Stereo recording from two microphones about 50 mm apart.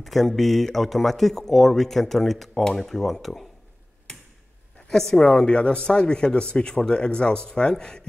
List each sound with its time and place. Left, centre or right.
0.0 s speech: centre
4.8 s speech: centre